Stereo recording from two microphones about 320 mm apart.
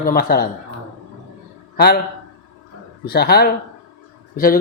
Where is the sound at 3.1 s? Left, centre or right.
Left.